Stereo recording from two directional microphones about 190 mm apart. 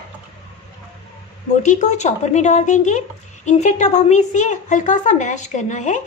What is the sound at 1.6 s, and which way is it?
A woman's voice, 40° left (ahead or behind).